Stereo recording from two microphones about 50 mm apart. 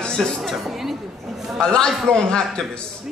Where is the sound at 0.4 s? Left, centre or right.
Centre.